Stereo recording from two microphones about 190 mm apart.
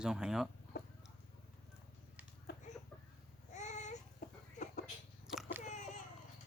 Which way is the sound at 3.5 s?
40° left (ahead or behind).